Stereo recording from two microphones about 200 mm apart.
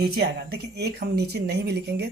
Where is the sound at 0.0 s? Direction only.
55° right (ahead or behind).